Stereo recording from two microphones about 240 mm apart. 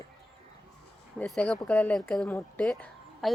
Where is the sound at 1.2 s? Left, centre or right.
Centre.